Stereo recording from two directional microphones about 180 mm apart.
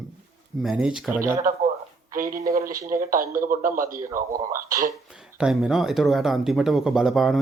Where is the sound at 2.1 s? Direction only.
50° right (ahead or behind).